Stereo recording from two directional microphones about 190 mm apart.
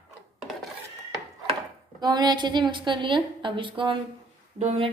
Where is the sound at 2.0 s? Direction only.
20° right (ahead or behind).